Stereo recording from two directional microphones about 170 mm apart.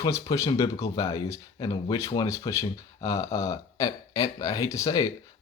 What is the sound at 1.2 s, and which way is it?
Speech, 20° left (ahead or behind).